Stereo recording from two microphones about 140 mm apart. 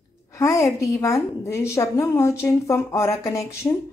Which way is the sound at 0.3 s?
20° left (ahead or behind).